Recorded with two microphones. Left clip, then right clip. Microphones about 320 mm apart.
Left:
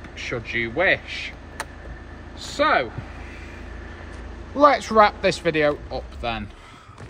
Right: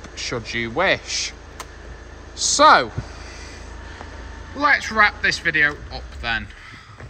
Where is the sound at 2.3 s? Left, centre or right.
Centre.